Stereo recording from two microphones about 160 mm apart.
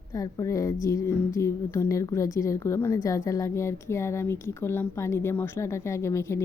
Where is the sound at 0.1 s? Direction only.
20° left (ahead or behind).